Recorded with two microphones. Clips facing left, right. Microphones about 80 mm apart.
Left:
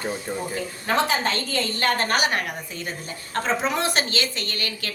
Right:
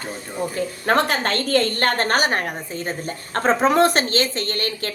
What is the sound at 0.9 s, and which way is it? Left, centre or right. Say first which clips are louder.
A woman's voice: right 3 dB; right.